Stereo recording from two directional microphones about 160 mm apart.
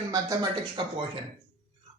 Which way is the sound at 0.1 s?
25° right (ahead or behind).